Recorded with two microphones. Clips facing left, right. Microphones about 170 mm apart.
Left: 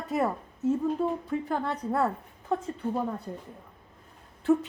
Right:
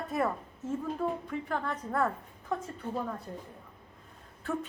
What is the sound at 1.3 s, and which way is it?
Speech, 35° left (ahead or behind).